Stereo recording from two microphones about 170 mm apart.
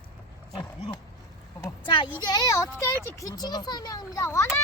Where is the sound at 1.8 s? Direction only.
30° left (ahead or behind).